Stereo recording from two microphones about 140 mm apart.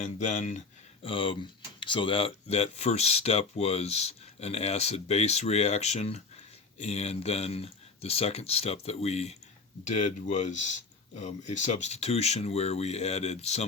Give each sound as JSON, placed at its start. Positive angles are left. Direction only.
{"t": 0.0, "sound": "speech", "side_deg": 60}
{"t": 1.0, "sound": "speech", "side_deg": 40}
{"t": 9.8, "sound": "speech", "side_deg": 60}